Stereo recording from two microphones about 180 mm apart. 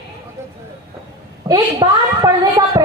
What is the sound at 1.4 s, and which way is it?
A woman's voice, 20° right (ahead or behind).